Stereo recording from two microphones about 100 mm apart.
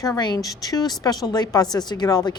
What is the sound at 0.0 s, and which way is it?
Speech, 45° left (ahead or behind).